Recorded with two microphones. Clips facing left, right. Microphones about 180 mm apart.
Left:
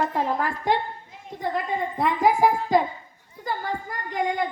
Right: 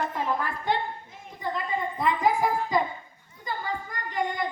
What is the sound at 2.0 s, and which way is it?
Speech, 65° left (ahead or behind).